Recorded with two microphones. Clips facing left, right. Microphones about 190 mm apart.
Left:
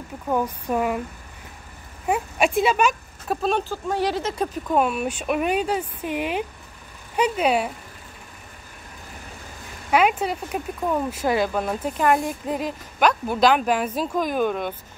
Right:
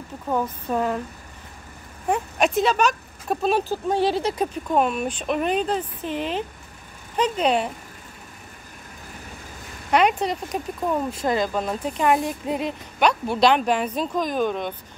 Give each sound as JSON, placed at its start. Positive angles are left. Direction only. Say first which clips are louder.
{"t": 0.3, "sound": "speech", "louder": "left 1 dB", "side_deg": 10}
{"t": 2.0, "sound": "speech", "louder": "even", "side_deg": 5}
{"t": 3.9, "sound": "speech", "louder": "right 2 dB", "side_deg": -25}
{"t": 4.7, "sound": "speech", "louder": "even", "side_deg": 5}
{"t": 9.8, "sound": "speech", "louder": "even", "side_deg": 5}